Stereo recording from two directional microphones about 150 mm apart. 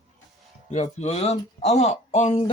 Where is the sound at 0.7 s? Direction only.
45° left (ahead or behind).